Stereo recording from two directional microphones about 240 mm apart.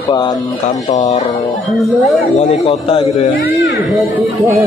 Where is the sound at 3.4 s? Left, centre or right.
Left.